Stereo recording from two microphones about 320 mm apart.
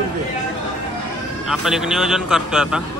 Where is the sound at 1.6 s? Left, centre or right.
Centre.